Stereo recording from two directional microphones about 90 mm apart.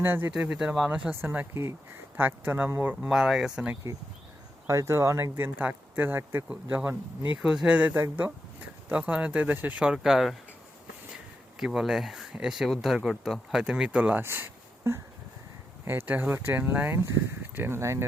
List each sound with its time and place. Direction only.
0.0 s speech: 25° right (ahead or behind)
0.3 s speech: 10° right (ahead or behind)
2.9 s speech: 10° right (ahead or behind)
4.6 s speech: 35° right (ahead or behind)
7.4 s speech: 10° right (ahead or behind)
11.6 s speech: 5° right (ahead or behind); by 18.0 s 30° right (ahead or behind)